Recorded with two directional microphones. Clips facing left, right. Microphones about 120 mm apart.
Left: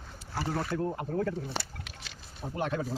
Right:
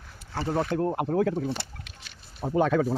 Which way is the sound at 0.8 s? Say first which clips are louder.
Right 6 dB; 60° right (ahead or behind).